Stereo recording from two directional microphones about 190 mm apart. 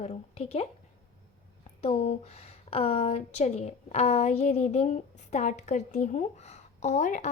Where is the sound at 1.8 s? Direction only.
35° left (ahead or behind).